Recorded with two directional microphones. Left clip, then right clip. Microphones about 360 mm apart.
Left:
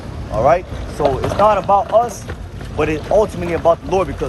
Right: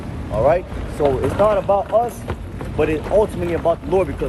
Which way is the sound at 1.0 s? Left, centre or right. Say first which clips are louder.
Left 3 dB; centre.